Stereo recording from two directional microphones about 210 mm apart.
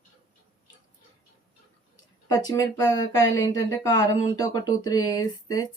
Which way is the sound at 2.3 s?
20° left (ahead or behind).